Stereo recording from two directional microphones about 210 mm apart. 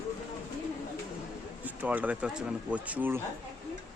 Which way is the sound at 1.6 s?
5° right (ahead or behind).